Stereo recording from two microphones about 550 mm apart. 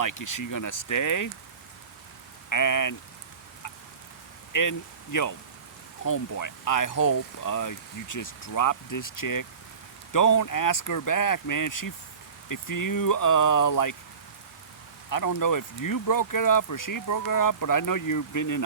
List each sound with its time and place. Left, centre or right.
0.0 s speech: left
2.5 s speech: left
4.5 s speech: left
15.1 s speech: left